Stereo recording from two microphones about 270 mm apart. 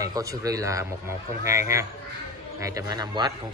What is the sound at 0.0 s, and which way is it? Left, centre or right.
A man's voice, centre.